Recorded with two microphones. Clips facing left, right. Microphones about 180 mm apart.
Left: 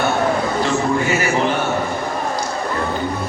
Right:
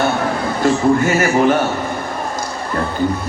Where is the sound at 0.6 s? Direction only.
45° right (ahead or behind).